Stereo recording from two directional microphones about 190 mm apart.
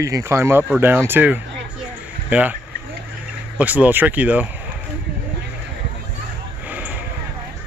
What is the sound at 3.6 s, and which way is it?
Speech, 10° right (ahead or behind).